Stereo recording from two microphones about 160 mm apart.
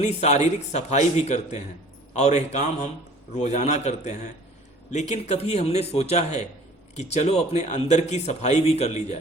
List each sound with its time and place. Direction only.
0.0 s a man's voice: 45° left (ahead or behind)